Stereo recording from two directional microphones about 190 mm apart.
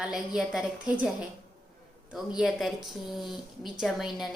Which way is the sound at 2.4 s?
5° right (ahead or behind).